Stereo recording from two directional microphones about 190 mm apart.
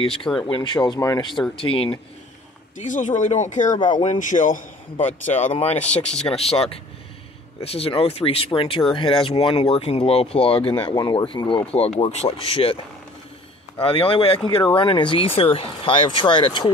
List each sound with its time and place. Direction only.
0.2 s speech: 5° left (ahead or behind)
0.5 s speech: 25° left (ahead or behind)
2.8 s speech: 40° left (ahead or behind)
5.5 s speech: 30° left (ahead or behind)
5.9 s speech: 5° left (ahead or behind)
6.3 s speech: 30° left (ahead or behind)
13.7 s speech: 30° left (ahead or behind)